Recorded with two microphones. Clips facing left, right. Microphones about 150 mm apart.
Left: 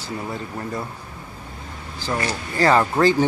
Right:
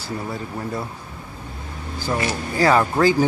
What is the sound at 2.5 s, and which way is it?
Speech, 5° right (ahead or behind).